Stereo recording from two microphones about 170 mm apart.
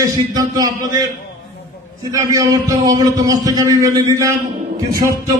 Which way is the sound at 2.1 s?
20° right (ahead or behind).